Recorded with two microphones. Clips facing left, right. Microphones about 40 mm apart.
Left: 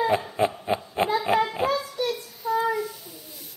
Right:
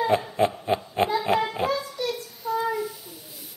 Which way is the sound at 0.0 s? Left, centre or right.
Centre.